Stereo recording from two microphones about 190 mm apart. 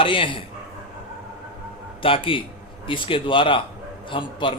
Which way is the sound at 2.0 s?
30° left (ahead or behind).